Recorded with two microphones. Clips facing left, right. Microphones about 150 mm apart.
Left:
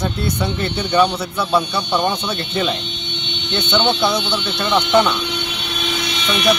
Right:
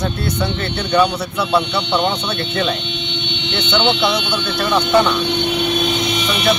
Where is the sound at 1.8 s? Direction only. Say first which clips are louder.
Right 1 dB; 20° right (ahead or behind).